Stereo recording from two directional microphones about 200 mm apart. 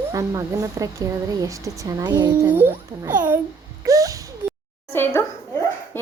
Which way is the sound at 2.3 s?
10° right (ahead or behind).